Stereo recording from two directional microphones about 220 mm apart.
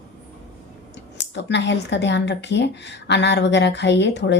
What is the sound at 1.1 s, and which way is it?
Speech, 50° left (ahead or behind).